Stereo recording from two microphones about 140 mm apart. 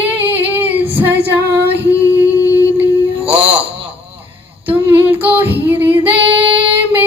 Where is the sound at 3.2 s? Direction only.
45° right (ahead or behind).